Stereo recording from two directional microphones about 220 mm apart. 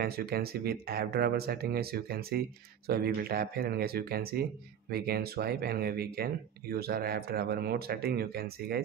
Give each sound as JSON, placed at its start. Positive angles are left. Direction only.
{"t": 0.0, "sound": "speech", "side_deg": -45}